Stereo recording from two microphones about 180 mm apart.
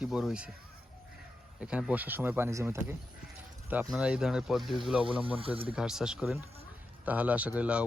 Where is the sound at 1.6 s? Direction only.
5° right (ahead or behind).